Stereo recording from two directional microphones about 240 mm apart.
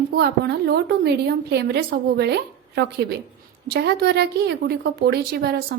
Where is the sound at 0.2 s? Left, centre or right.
Right.